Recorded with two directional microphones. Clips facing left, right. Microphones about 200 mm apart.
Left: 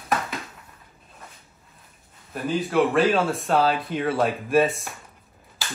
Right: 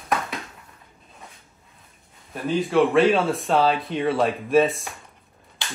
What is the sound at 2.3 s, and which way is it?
Speech, centre (ahead or behind).